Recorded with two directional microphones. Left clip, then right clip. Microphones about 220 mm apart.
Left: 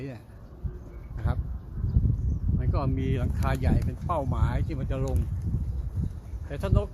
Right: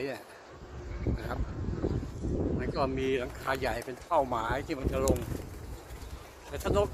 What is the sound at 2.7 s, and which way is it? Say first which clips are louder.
Speech: right 1 dB; 5° right (ahead or behind).